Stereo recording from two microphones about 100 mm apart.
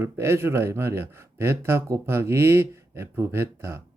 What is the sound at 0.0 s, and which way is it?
Speech, 25° right (ahead or behind).